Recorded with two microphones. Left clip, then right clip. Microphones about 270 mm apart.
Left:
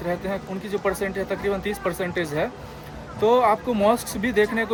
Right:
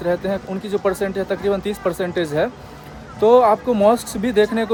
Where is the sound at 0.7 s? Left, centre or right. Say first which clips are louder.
Right 5 dB; centre.